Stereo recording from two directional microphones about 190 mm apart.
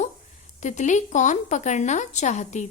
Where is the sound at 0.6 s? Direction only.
40° left (ahead or behind).